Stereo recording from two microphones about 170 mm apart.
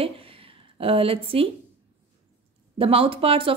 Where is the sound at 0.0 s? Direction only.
35° right (ahead or behind).